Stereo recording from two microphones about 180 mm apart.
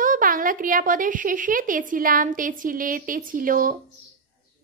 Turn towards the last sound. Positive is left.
turn(degrees=-50)  # may be behind; listen again after turning